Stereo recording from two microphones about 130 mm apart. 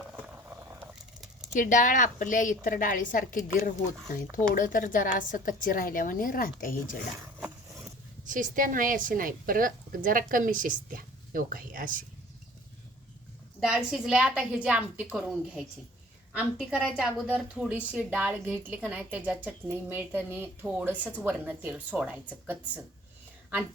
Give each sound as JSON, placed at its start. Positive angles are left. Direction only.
{"t": 1.5, "sound": "a woman's voice", "side_deg": 90}
{"t": 4.5, "sound": "a woman's voice", "side_deg": 90}
{"t": 8.3, "sound": "a woman's voice", "side_deg": -85}
{"t": 13.6, "sound": "a woman's voice", "side_deg": -5}